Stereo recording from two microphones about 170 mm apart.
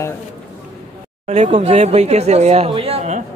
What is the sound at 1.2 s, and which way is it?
Speech, 40° right (ahead or behind).